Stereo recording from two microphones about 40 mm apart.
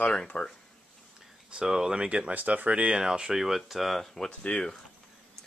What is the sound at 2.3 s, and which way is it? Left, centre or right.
Speech, right.